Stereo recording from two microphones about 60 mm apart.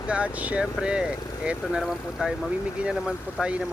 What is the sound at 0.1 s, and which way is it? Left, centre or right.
Speech, right.